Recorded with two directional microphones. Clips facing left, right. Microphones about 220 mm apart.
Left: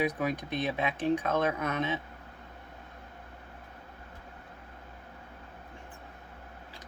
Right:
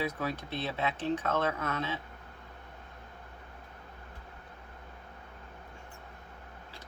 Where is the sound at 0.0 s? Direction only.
15° left (ahead or behind).